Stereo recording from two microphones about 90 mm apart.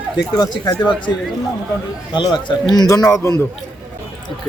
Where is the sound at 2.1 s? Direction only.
60° left (ahead or behind).